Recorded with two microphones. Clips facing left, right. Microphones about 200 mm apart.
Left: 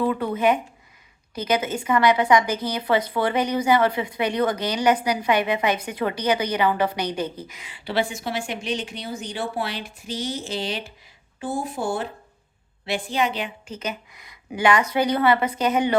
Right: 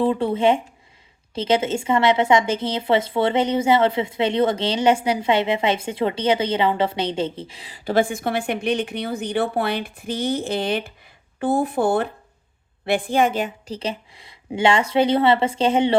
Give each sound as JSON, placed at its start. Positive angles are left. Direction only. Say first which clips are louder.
{"t": 0.0, "sound": "a woman's voice", "louder": "right 3 dB", "side_deg": -30}
{"t": 13.7, "sound": "a woman's voice", "louder": "right 3 dB", "side_deg": -30}